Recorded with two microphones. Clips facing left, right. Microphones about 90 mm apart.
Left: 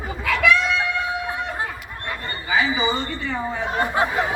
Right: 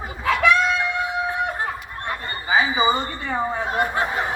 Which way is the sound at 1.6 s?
35° right (ahead or behind).